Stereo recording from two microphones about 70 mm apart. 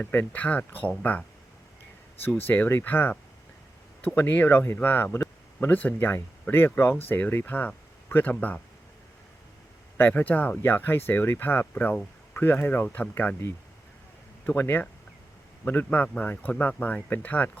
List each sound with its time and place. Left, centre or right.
0.0 s speech: left
2.2 s speech: left
10.0 s speech: left
14.4 s speech: left